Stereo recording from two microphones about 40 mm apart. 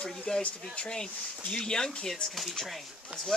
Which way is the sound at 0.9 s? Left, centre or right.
Centre.